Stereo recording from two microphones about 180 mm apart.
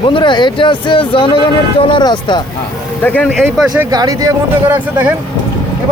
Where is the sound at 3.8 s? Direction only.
20° right (ahead or behind).